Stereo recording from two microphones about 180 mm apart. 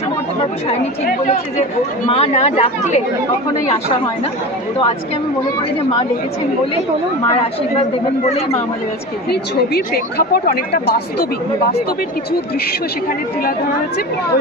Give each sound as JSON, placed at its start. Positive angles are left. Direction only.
{"t": 1.2, "sound": "speech", "side_deg": 35}
{"t": 9.3, "sound": "a woman's voice", "side_deg": 60}